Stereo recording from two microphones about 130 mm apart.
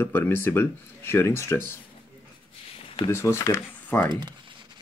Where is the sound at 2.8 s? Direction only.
45° left (ahead or behind).